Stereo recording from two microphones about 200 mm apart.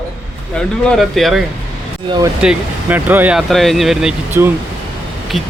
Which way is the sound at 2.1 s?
20° right (ahead or behind).